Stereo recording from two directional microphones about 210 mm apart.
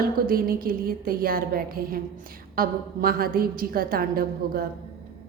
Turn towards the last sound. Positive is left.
turn(degrees=-45)  # may be behind; listen again after turning